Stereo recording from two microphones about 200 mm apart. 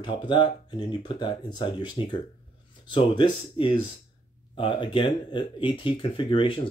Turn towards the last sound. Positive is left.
turn(degrees=25)  # may be behind; listen again after turning